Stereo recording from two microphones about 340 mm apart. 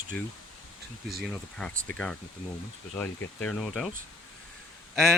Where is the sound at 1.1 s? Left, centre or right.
Centre.